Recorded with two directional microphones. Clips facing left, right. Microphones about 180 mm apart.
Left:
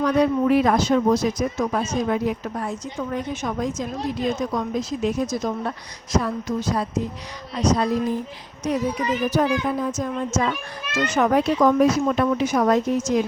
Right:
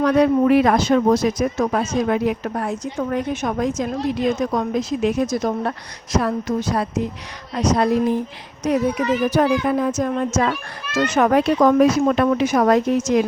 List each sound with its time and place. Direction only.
0.0 s a woman's voice: 70° right (ahead or behind)
1.6 s a woman's voice: 65° right (ahead or behind)
11.8 s a woman's voice: 85° right